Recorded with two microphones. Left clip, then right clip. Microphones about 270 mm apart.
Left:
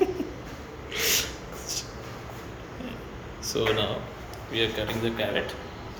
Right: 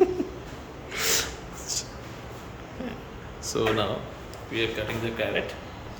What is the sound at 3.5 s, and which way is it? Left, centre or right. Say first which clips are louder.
Speech: even; centre.